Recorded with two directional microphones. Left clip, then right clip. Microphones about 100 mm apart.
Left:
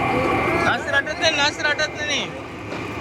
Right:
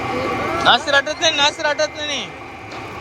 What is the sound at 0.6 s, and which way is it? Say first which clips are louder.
Vehicle: right 6 dB; 30° right (ahead or behind).